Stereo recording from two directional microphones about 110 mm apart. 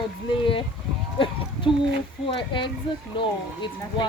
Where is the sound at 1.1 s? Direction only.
50° left (ahead or behind).